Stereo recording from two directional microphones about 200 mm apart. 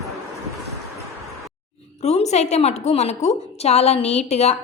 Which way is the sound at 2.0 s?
35° left (ahead or behind).